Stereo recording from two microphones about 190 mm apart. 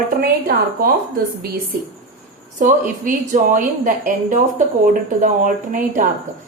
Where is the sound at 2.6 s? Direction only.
45° right (ahead or behind).